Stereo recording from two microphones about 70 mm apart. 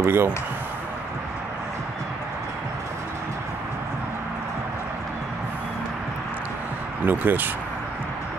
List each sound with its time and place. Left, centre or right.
0.0 s speech: right
7.1 s speech: right